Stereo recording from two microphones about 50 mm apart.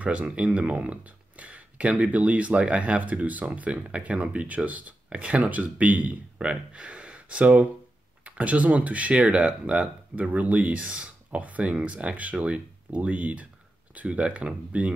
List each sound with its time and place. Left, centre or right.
0.0 s speech: right